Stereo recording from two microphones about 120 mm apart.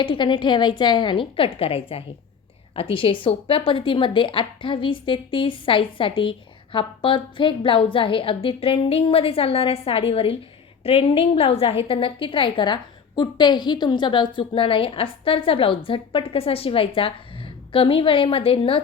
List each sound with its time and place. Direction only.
0.0 s a woman's voice: 45° left (ahead or behind)